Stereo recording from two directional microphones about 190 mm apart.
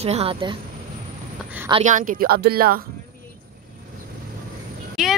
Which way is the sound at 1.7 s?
35° right (ahead or behind).